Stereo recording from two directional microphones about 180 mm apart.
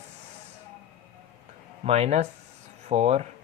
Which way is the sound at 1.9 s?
35° right (ahead or behind).